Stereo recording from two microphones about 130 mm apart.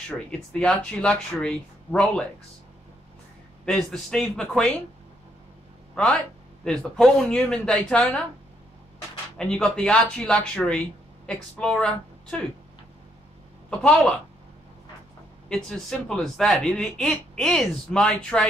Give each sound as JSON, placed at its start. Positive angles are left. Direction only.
{"t": 0.5, "sound": "speech", "side_deg": 10}
{"t": 3.6, "sound": "speech", "side_deg": 5}
{"t": 6.6, "sound": "speech", "side_deg": 5}
{"t": 9.4, "sound": "speech", "side_deg": 5}
{"t": 13.7, "sound": "speech", "side_deg": 5}
{"t": 15.4, "sound": "speech", "side_deg": 5}